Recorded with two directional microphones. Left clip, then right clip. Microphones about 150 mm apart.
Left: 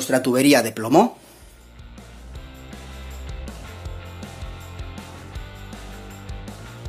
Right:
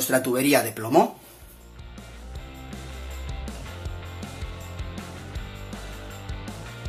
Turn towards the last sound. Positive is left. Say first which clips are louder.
# even
turn(degrees=0)  # may be behind; listen again after turning